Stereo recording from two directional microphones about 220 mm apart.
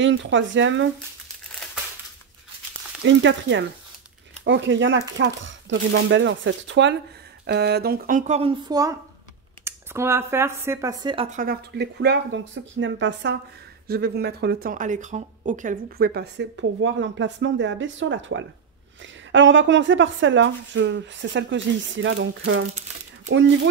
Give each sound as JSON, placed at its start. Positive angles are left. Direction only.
{"t": 0.0, "sound": "a woman's voice", "side_deg": -55}
{"t": 3.1, "sound": "a woman's voice", "side_deg": -60}
{"t": 11.2, "sound": "a woman's voice", "side_deg": -40}